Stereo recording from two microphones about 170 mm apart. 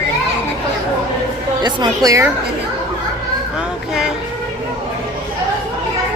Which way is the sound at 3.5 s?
5° right (ahead or behind).